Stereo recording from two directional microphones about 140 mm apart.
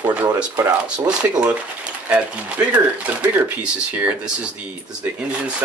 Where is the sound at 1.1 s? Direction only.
5° right (ahead or behind).